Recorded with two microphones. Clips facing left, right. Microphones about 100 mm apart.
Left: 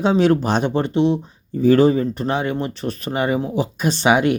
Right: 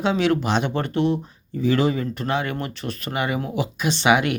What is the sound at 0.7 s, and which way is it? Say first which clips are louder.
Speech: left 4 dB; 25° left (ahead or behind).